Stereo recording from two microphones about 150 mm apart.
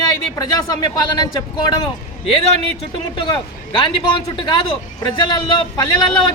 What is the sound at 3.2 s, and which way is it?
Speech, 30° left (ahead or behind).